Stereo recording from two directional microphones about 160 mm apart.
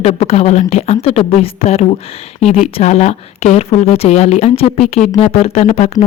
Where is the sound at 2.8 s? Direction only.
45° left (ahead or behind).